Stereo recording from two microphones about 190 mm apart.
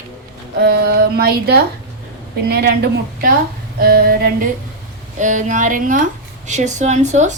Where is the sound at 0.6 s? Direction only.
55° right (ahead or behind).